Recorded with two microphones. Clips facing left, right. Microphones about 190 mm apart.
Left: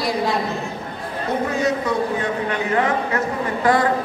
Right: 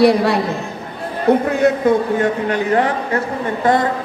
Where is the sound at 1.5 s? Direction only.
60° right (ahead or behind).